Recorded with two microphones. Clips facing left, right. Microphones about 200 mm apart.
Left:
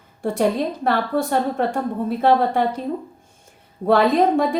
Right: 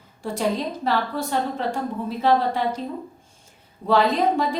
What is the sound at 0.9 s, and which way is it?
A woman's voice, 55° left (ahead or behind).